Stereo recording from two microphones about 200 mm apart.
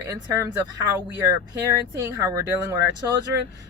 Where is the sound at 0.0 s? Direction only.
15° right (ahead or behind).